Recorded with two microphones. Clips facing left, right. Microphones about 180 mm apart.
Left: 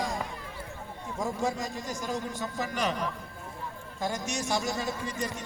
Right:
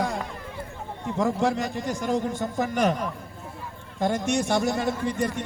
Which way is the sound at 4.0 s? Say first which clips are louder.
Right 8 dB; 55° right (ahead or behind).